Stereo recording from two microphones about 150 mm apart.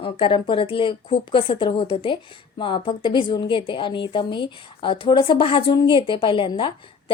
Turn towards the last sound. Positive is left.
turn(degrees=35)  # may be behind; listen again after turning